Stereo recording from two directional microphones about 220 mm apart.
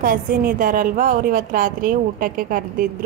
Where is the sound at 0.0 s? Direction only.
40° right (ahead or behind).